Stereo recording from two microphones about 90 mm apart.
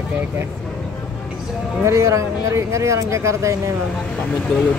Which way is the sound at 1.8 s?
35° right (ahead or behind).